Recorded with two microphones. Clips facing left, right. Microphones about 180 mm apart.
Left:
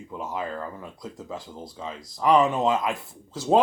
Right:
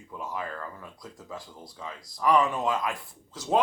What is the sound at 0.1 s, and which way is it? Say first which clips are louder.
Speech: left 4 dB; 25° left (ahead or behind).